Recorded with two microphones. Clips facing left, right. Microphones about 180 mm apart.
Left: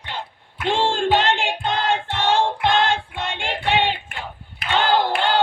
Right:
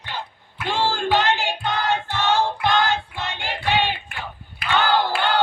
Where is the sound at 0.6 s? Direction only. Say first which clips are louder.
Left 3 dB; 25° left (ahead or behind).